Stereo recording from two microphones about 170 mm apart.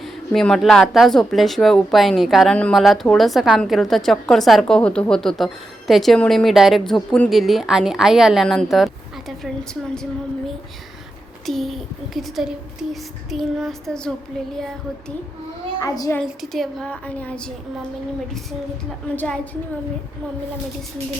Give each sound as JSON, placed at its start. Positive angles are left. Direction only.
{"t": 0.0, "sound": "speech", "side_deg": 0}
{"t": 15.8, "sound": "a child's voice", "side_deg": 20}
{"t": 16.2, "sound": "speech", "side_deg": 0}
{"t": 19.1, "sound": "a woman's voice", "side_deg": 10}